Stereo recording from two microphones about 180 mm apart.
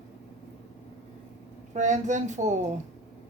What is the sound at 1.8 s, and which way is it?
Speech, 45° right (ahead or behind).